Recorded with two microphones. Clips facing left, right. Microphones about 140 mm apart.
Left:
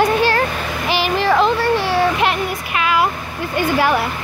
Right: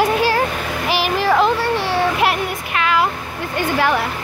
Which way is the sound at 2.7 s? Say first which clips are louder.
Even; 10° left (ahead or behind).